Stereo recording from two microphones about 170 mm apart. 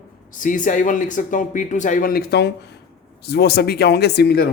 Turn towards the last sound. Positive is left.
turn(degrees=70)  # may be behind; listen again after turning